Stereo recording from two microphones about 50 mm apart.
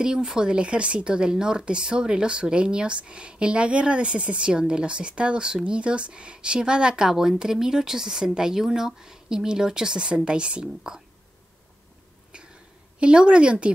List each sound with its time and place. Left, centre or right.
0.0 s speech: centre
13.0 s a woman's voice: centre